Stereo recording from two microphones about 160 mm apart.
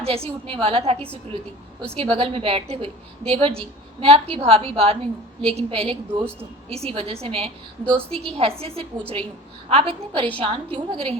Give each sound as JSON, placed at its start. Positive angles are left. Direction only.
{"t": 0.0, "sound": "a woman's voice", "side_deg": -40}
{"t": 2.0, "sound": "a woman's voice", "side_deg": -35}